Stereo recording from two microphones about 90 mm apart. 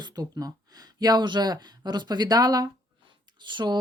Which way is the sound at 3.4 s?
60° right (ahead or behind).